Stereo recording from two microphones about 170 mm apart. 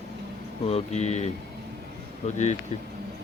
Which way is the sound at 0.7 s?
40° left (ahead or behind).